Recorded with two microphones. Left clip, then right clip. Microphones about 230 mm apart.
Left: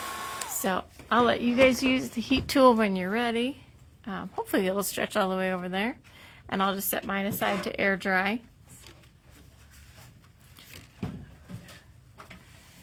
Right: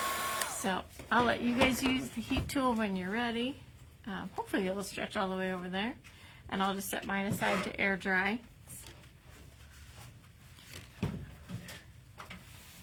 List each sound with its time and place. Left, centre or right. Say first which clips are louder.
0.0 s hair dryer: right 1 dB; centre
0.6 s a woman's voice: left 6 dB; left